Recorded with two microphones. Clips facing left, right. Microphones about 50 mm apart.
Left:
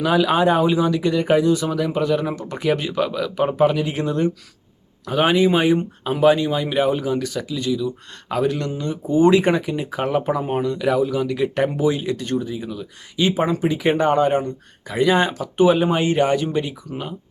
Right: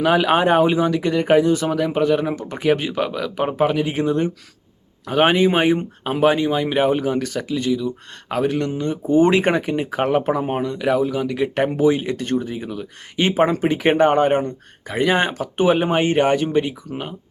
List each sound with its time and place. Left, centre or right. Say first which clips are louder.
0.0 s speech: right 1 dB; right